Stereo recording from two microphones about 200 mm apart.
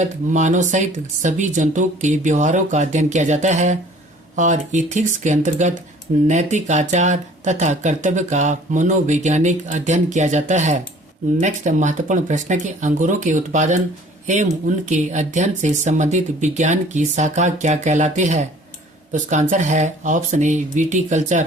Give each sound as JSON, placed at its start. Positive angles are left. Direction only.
{"t": 0.0, "sound": "speech", "side_deg": -35}